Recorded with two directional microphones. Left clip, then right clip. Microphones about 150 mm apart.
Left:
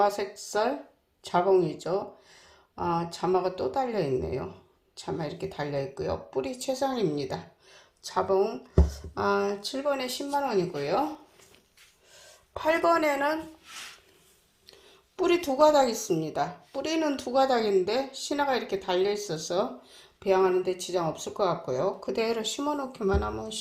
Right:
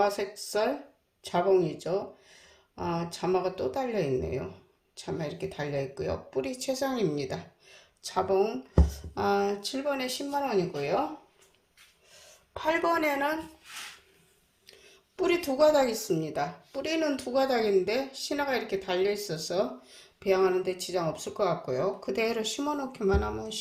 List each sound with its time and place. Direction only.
0.0 s a woman's voice: centre (ahead or behind)
8.1 s speech: 10° right (ahead or behind)
8.8 s speech: 35° right (ahead or behind)
9.1 s a woman's voice: centre (ahead or behind)
12.1 s speech: 10° left (ahead or behind)
15.2 s speech: 40° right (ahead or behind)
15.4 s a woman's voice: centre (ahead or behind)
18.4 s speech: 35° right (ahead or behind)
20.0 s a woman's voice: centre (ahead or behind)